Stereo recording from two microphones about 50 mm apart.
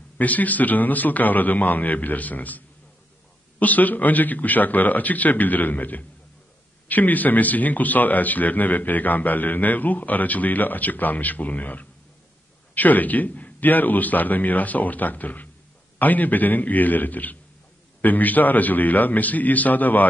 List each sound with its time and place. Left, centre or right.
0.2 s a man's voice: left